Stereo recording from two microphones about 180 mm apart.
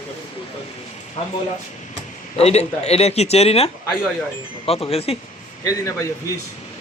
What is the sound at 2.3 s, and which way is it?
Speech, 35° left (ahead or behind).